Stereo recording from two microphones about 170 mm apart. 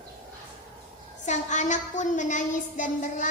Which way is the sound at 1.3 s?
45° left (ahead or behind).